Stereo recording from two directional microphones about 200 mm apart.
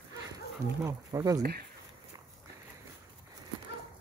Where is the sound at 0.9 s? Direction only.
15° right (ahead or behind).